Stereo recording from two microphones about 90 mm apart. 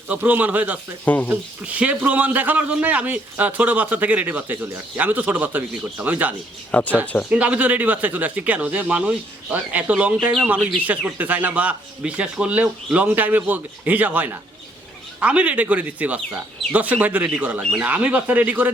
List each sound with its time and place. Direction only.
0.1 s a man's voice: 20° right (ahead or behind)
1.0 s speech: 20° left (ahead or behind)
1.3 s a man's voice: 15° right (ahead or behind)
6.7 s speech: 20° left (ahead or behind)
7.3 s a man's voice: 15° right (ahead or behind)
17.6 s speech: 5° right (ahead or behind)
17.8 s a man's voice: 15° right (ahead or behind)